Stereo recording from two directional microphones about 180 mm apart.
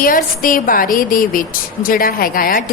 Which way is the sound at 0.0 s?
50° left (ahead or behind).